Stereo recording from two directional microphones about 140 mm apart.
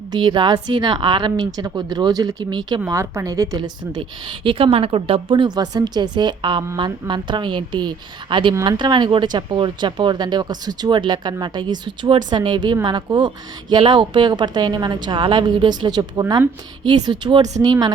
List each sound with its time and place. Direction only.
0.1 s speech: 35° right (ahead or behind)